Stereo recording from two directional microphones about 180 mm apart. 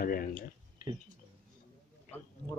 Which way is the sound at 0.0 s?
50° left (ahead or behind).